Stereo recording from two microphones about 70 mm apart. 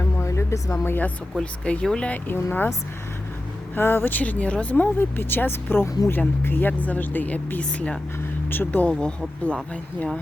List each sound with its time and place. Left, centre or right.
0.0 s a sound: left
0.9 s speech: left
1.4 s speech: centre
2.0 s speech: left
3.8 s speech: left; by 9.6 s centre